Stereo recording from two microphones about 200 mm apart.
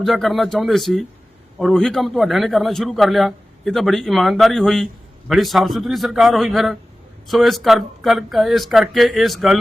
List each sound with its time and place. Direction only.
0.0 s a man's voice: centre (ahead or behind)